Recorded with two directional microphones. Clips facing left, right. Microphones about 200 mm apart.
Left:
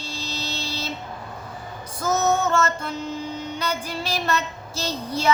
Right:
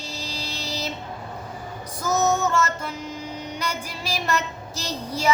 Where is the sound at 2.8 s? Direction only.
10° right (ahead or behind).